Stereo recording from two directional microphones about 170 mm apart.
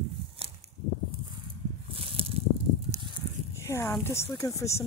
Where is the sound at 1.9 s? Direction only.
35° right (ahead or behind).